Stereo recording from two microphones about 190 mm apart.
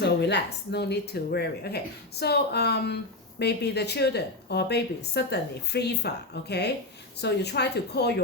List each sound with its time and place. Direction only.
0.0 s speech: 65° left (ahead or behind)